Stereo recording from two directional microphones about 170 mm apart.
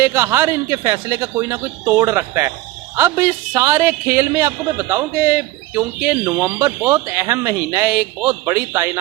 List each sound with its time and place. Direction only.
0.0 s a man's voice: 15° right (ahead or behind)